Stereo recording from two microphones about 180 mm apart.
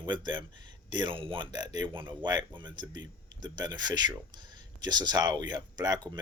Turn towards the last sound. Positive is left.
turn(degrees=-20)  # may be behind; listen again after turning